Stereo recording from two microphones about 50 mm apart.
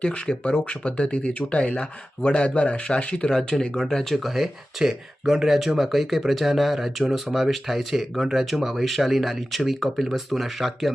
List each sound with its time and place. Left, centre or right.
0.0 s speech: left
3.3 s speech: centre
4.1 s speech: centre